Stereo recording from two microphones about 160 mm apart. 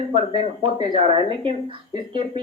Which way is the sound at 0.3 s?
35° right (ahead or behind).